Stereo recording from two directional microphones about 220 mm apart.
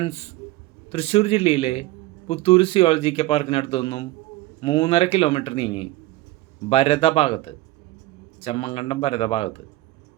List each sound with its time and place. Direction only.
0.0 s a man's voice: 30° left (ahead or behind)